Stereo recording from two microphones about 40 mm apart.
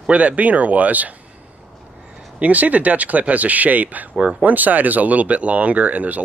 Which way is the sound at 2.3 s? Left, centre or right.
Right.